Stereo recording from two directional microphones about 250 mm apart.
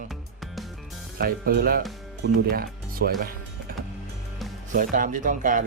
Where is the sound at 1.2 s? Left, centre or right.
Right.